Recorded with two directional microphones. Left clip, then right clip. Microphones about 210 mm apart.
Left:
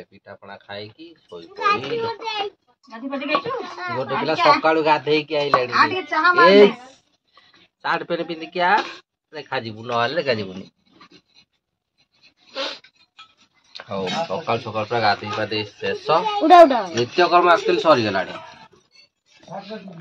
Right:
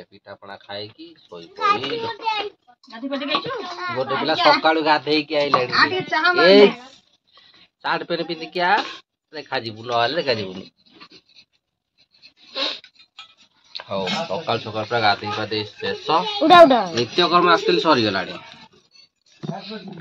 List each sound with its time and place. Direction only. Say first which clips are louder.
0.0 s speech: right 1 dB; 5° right (ahead or behind)
2.9 s speech: left 1 dB; 30° left (ahead or behind)
4.0 s speech: right 1 dB; centre (ahead or behind)
5.7 s speech: even; 25° left (ahead or behind)
7.3 s speech: right 2 dB; centre (ahead or behind)
12.5 s a sound: right 3 dB; centre (ahead or behind)
13.7 s speech: even; centre (ahead or behind)
16.4 s speech: even; 45° right (ahead or behind)
17.0 s speech: left 6 dB; 5° left (ahead or behind)